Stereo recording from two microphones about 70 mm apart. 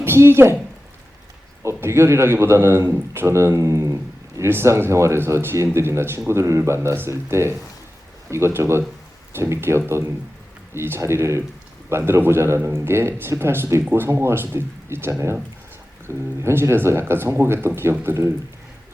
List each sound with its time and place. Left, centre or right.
0.0 s a woman's voice: right
1.6 s a man's voice: right